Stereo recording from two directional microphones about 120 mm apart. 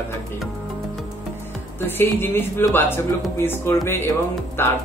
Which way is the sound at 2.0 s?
20° left (ahead or behind).